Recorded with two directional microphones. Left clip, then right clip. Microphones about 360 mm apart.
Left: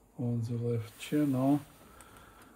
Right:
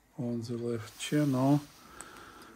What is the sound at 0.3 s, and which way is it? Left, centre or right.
Speech, right.